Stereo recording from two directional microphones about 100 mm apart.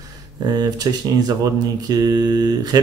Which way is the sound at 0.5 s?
40° right (ahead or behind).